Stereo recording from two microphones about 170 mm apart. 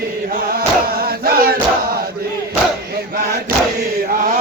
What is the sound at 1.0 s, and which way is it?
Chant, 60° right (ahead or behind).